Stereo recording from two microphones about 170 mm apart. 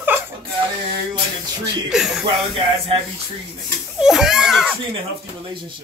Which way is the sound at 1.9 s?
5° right (ahead or behind).